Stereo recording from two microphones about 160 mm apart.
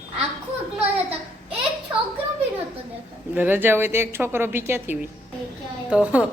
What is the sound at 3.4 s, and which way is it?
A woman's voice, 10° right (ahead or behind).